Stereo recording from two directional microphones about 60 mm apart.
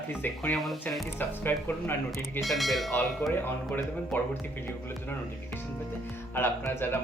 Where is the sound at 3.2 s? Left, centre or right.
Left.